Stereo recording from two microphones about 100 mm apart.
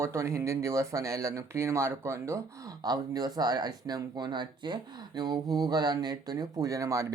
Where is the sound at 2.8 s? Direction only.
40° right (ahead or behind).